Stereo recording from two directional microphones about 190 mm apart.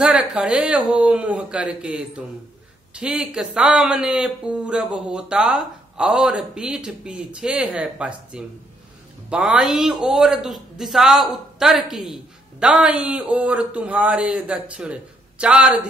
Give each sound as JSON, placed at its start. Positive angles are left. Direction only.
{"t": 0.0, "sound": "a man's voice", "side_deg": -5}